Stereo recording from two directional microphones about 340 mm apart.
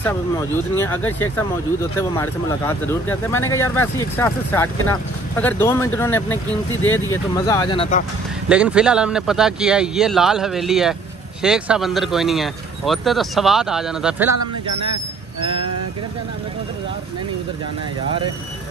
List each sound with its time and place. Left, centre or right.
0.7 s speech: centre
8.5 s speech: centre
14.3 s speech: right